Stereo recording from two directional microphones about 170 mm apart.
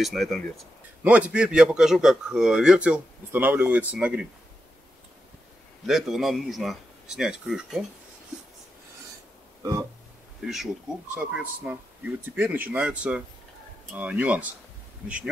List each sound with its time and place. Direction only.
0.0 s a man's voice: centre (ahead or behind)
5.9 s a man's voice: centre (ahead or behind)
9.6 s a sound: 20° right (ahead or behind)
10.4 s a man's voice: centre (ahead or behind)